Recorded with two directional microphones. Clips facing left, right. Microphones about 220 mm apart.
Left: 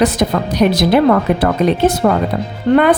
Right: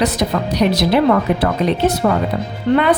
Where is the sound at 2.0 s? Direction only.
40° left (ahead or behind).